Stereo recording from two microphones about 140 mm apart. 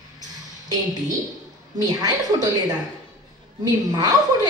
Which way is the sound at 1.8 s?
25° right (ahead or behind).